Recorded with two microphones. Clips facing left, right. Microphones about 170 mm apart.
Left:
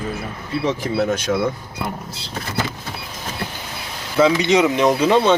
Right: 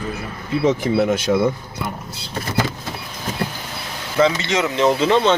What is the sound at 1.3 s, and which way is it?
Speech, 15° right (ahead or behind).